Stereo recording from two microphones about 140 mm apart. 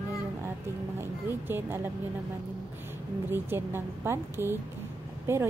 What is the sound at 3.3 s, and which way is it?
Speech, 15° right (ahead or behind).